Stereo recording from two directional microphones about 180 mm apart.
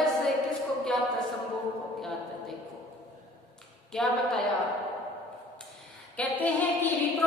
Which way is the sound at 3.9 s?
Centre (ahead or behind).